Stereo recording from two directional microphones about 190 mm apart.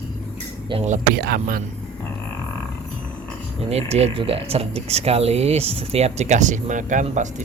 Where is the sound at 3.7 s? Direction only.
35° right (ahead or behind).